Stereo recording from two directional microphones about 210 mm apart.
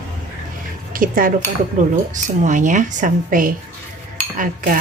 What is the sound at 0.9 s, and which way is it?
Speech, 40° right (ahead or behind).